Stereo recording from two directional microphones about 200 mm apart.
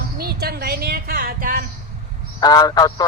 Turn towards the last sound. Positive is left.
turn(degrees=20)  # may be behind; listen again after turning